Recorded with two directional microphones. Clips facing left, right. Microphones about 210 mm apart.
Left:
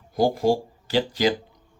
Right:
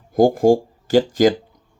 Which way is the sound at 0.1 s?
50° right (ahead or behind).